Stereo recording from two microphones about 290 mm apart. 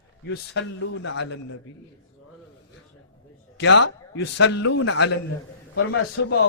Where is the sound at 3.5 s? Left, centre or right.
Left.